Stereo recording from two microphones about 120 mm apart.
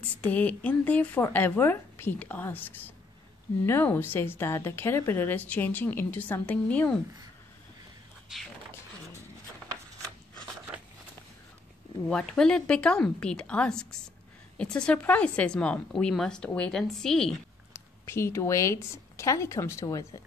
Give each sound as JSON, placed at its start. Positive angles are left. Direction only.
{"t": 0.1, "sound": "a woman's voice", "side_deg": 10}
{"t": 8.3, "sound": "a woman's voice", "side_deg": -5}
{"t": 12.1, "sound": "a woman's voice", "side_deg": 5}
{"t": 18.0, "sound": "speech", "side_deg": 20}